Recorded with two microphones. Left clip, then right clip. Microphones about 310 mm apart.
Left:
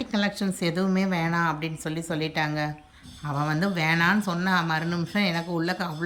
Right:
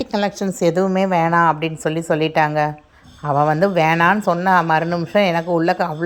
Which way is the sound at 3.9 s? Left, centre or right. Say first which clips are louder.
Right 8 dB; centre.